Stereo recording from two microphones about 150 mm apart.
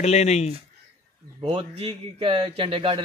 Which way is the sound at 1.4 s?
30° right (ahead or behind).